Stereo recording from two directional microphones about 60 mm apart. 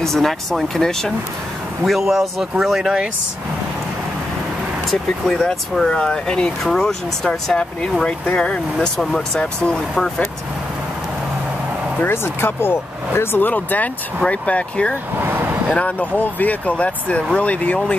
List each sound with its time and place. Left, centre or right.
0.0 s speech: centre
1.9 s speech: centre
5.2 s speech: centre
12.0 s speech: left; by 15.0 s centre
15.1 s vehicle: right
15.8 s speech: left